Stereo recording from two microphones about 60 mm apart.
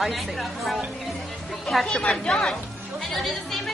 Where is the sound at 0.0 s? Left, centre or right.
Centre.